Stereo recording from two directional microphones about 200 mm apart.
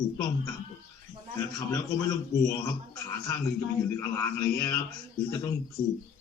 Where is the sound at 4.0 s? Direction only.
15° left (ahead or behind).